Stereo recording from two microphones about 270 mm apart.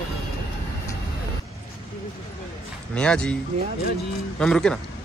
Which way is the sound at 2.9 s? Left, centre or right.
Centre.